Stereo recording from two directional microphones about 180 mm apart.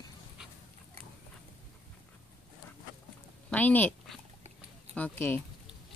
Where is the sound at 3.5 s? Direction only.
10° left (ahead or behind).